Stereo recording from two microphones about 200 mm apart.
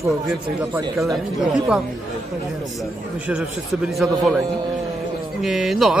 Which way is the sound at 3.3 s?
Centre (ahead or behind).